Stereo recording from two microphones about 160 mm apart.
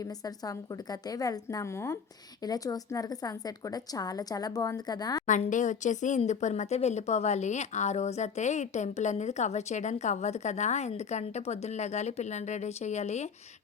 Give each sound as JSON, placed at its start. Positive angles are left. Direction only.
{"t": 0.0, "sound": "a woman's voice", "side_deg": 25}
{"t": 5.2, "sound": "speech", "side_deg": 50}